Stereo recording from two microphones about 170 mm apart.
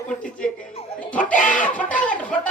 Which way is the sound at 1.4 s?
50° left (ahead or behind).